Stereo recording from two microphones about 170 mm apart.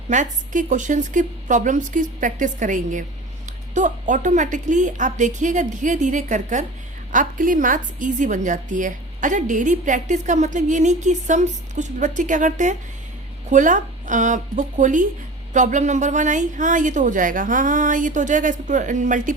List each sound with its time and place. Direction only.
0.1 s a woman's voice: 45° right (ahead or behind)